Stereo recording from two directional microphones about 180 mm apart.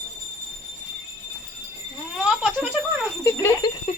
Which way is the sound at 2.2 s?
5° right (ahead or behind).